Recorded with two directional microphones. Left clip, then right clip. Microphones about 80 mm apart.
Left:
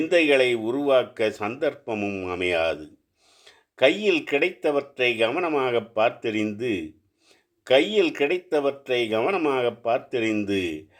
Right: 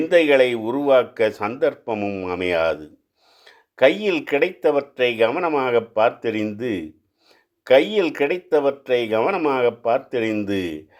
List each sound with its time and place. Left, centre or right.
0.0 s speech: right